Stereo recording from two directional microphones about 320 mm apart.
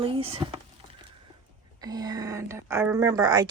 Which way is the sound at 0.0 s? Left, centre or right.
Centre.